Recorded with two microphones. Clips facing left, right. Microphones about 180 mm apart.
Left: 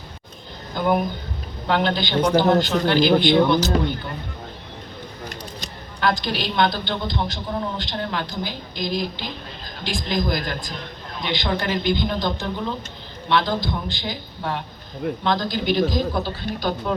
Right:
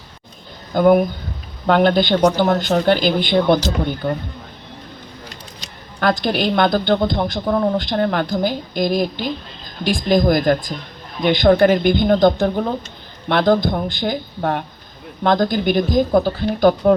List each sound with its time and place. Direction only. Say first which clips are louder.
0.7 s a woman's voice: right 8 dB; 50° right (ahead or behind)
6.0 s a woman's voice: right 5 dB; 55° right (ahead or behind)